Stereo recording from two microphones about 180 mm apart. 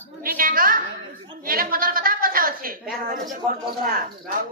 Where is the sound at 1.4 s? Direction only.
50° right (ahead or behind).